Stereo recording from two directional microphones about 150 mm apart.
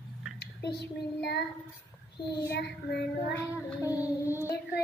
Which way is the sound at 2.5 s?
90° left.